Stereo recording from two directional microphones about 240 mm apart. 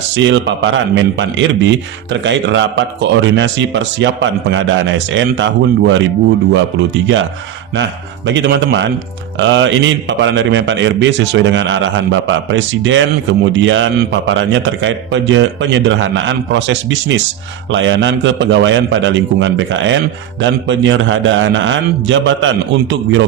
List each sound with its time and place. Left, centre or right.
0.2 s a man's voice: right
8.3 s a man's voice: right